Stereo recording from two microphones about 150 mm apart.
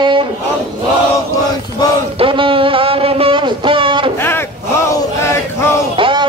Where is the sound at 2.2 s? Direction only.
35° right (ahead or behind).